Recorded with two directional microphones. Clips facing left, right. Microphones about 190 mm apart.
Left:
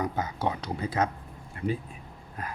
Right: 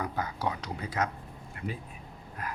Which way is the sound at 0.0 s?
20° left (ahead or behind).